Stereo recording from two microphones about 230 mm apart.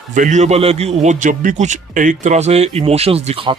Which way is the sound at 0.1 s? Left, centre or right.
Right.